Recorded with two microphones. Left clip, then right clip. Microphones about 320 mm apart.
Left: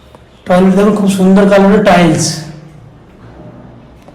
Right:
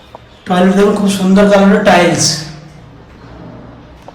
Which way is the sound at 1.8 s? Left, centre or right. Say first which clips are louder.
Even; left.